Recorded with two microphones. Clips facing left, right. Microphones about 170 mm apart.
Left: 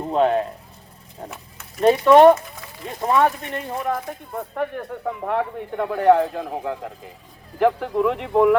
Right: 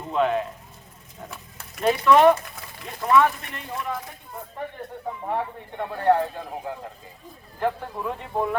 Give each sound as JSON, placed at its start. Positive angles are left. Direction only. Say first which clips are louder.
{"t": 0.1, "sound": "a man's voice", "louder": "left 4 dB", "side_deg": 40}
{"t": 1.8, "sound": "speech", "louder": "left 5 dB", "side_deg": 40}
{"t": 4.5, "sound": "speech", "louder": "left 7 dB", "side_deg": 75}